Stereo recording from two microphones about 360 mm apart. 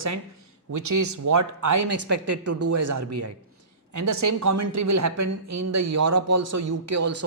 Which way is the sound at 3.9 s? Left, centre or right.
Right.